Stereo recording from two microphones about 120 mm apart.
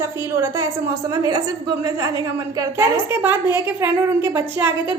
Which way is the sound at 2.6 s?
20° right (ahead or behind).